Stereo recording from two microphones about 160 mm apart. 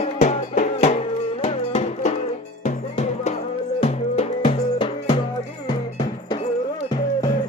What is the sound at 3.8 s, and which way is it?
Music, 40° left (ahead or behind).